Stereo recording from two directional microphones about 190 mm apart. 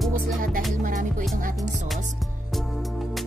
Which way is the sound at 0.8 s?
45° right (ahead or behind).